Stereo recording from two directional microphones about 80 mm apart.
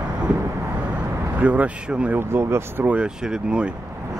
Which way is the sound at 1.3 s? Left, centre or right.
Centre.